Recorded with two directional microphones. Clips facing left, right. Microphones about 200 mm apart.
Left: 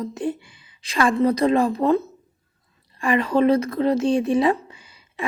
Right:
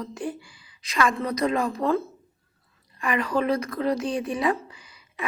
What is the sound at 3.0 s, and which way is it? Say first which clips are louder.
A woman's voice: left 6 dB; 25° left (ahead or behind).